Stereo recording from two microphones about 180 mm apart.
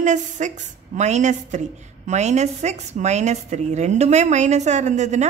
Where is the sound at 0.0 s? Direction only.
40° right (ahead or behind).